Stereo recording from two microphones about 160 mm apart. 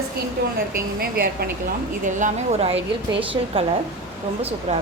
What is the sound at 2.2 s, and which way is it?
A woman's voice, 40° right (ahead or behind).